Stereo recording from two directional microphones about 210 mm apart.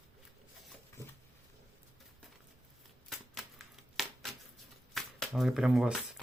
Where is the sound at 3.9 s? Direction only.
Centre (ahead or behind).